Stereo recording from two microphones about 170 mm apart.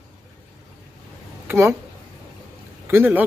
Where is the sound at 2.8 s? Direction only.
10° right (ahead or behind).